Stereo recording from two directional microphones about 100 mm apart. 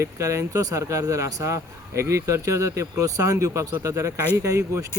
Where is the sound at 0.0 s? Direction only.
30° right (ahead or behind).